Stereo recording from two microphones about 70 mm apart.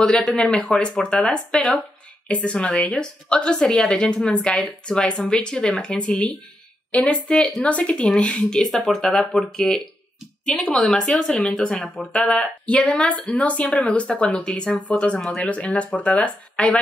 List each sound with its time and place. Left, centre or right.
0.0 s a woman's voice: centre
10.8 s a woman's voice: centre